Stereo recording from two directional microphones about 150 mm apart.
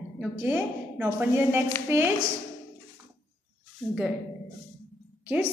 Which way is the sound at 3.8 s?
5° left (ahead or behind).